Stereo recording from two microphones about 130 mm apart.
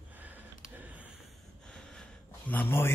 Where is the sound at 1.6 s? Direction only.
5° left (ahead or behind).